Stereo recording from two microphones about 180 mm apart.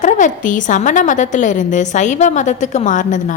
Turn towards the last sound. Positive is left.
turn(degrees=45)  # may be behind; listen again after turning